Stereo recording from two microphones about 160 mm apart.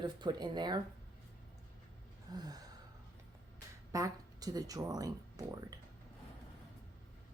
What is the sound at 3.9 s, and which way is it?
Speech, 20° right (ahead or behind).